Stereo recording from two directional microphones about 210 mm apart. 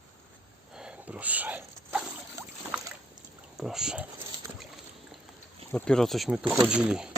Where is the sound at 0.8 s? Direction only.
5° right (ahead or behind).